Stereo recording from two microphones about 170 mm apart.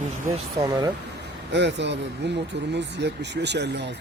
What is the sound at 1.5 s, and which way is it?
Speech, 90° right.